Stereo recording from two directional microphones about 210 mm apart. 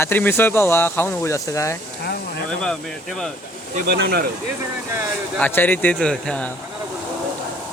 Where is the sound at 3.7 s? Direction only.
50° right (ahead or behind).